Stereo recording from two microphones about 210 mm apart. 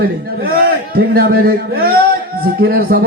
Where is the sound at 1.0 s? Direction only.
45° right (ahead or behind).